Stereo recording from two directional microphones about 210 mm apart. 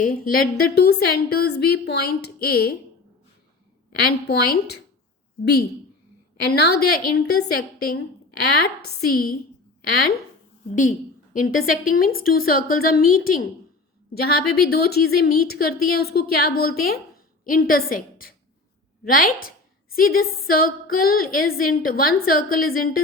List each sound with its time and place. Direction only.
0.0 s a woman's voice: 45° left (ahead or behind)
4.3 s a woman's voice: 50° left (ahead or behind)
6.5 s a woman's voice: 50° left (ahead or behind)
11.3 s a woman's voice: 40° left (ahead or behind)